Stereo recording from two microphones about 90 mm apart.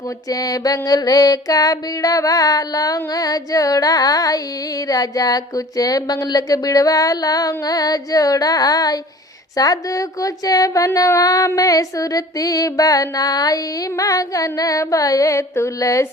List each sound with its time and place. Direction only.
0.3 s music: 45° left (ahead or behind)
9.6 s speech: 40° left (ahead or behind)